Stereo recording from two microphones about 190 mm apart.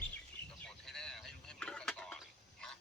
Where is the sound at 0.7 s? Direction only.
5° left (ahead or behind).